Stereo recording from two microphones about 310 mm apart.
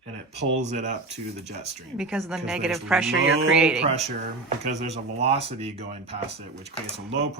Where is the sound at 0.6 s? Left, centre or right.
Right.